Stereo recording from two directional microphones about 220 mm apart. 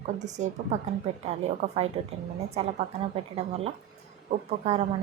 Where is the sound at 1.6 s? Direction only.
30° right (ahead or behind).